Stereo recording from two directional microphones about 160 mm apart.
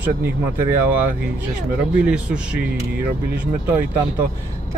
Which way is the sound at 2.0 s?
5° right (ahead or behind).